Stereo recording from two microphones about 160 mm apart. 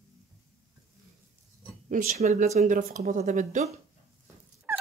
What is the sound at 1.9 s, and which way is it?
Speech, 55° right (ahead or behind).